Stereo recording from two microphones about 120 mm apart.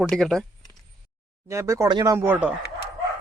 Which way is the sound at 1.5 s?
25° right (ahead or behind).